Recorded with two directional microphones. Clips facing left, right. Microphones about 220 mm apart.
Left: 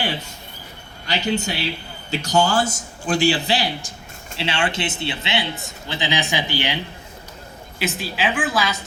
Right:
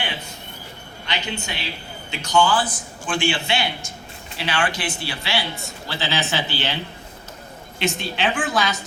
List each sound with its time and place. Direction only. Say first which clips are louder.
1.0 s a man's voice: left 7 dB; 40° left (ahead or behind)
4.4 s speech: left 1 dB; 25° left (ahead or behind)
7.8 s a woman's voice: right 1 dB; 5° left (ahead or behind)